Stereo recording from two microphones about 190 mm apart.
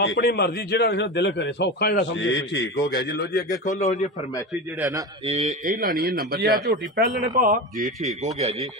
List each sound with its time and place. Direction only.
0.0 s a man's voice: 60° left (ahead or behind); by 4.0 s 40° left (ahead or behind)
5.3 s speech: 40° right (ahead or behind)